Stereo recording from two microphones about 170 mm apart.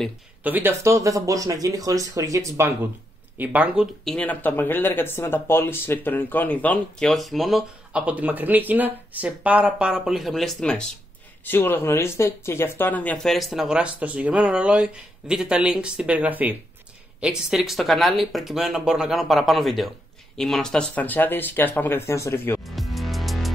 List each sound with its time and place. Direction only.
0.4 s speech: 10° right (ahead or behind); by 22.6 s 15° left (ahead or behind)
22.6 s music: centre (ahead or behind)